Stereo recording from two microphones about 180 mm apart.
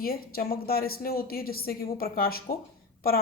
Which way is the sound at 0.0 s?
55° left (ahead or behind).